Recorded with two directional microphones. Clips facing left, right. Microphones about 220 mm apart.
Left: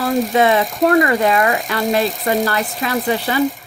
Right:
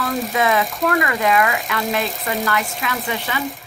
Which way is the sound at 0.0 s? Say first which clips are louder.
Left 5 dB; 30° left (ahead or behind).